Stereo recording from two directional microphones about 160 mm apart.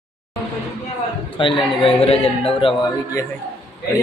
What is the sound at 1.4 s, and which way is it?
A man's voice, 30° left (ahead or behind).